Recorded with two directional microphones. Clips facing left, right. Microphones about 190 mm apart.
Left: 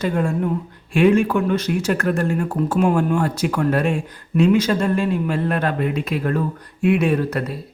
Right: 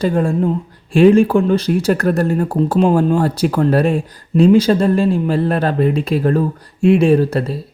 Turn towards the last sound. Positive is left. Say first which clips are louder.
# right 6 dB
turn(degrees=-30)  # may be behind; listen again after turning